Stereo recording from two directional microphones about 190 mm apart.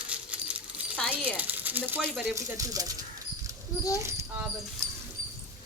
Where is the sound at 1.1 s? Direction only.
10° right (ahead or behind).